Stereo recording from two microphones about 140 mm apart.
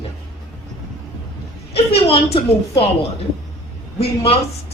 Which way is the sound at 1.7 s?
45° left (ahead or behind).